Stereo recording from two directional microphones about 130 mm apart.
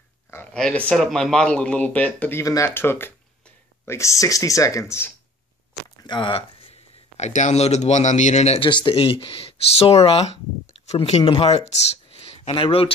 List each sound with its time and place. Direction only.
0.3 s a sound: 15° left (ahead or behind)
0.6 s a man's voice: 5° left (ahead or behind)
2.4 s speech: 25° left (ahead or behind)
6.0 s speech: 35° left (ahead or behind); by 8.6 s 55° left (ahead or behind)
8.6 s speech: 40° left (ahead or behind)